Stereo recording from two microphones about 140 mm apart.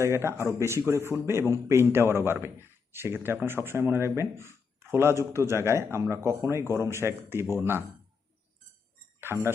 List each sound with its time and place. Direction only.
0.0 s a man's voice: 20° right (ahead or behind)
9.2 s speech: 15° right (ahead or behind)